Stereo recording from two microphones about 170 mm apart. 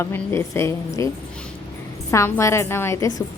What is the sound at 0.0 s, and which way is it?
A woman's voice, 15° left (ahead or behind).